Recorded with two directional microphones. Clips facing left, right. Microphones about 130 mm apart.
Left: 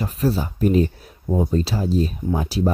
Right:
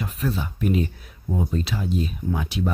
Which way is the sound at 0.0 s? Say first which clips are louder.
Left 5 dB; 35° left (ahead or behind).